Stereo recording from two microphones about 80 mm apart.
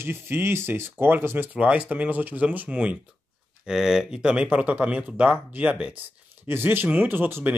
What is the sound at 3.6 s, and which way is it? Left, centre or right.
Speech, centre.